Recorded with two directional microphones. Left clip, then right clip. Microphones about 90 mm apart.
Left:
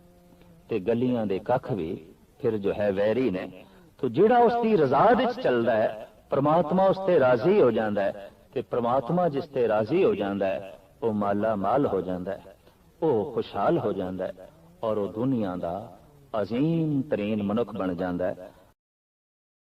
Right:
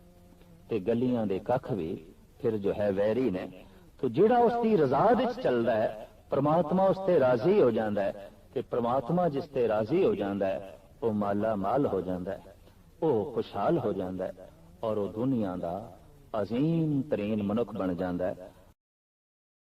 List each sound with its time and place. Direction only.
0.7 s a man's voice: 40° left (ahead or behind)